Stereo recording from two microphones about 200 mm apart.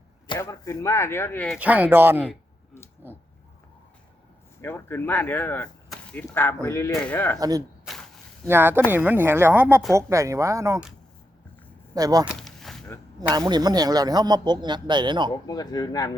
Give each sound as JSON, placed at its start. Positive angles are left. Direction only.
{"t": 0.3, "sound": "speech", "side_deg": 15}
{"t": 1.5, "sound": "speech", "side_deg": -5}
{"t": 3.0, "sound": "a sound", "side_deg": -10}
{"t": 4.6, "sound": "speech", "side_deg": 10}
{"t": 7.3, "sound": "speech", "side_deg": -20}
{"t": 11.9, "sound": "speech", "side_deg": -20}
{"t": 12.2, "sound": "a sound", "side_deg": 0}
{"t": 13.3, "sound": "speech", "side_deg": -20}
{"t": 15.4, "sound": "speech", "side_deg": 20}